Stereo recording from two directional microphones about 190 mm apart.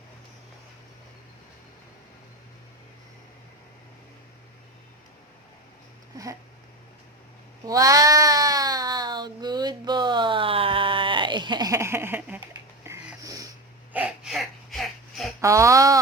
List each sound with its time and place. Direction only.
7.7 s cat: 20° right (ahead or behind)
12.8 s music: 15° right (ahead or behind)
13.9 s a sound: 5° right (ahead or behind)
15.4 s speech: 15° right (ahead or behind)